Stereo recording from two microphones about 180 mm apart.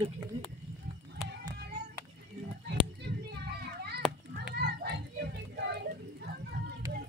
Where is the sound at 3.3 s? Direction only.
65° right (ahead or behind).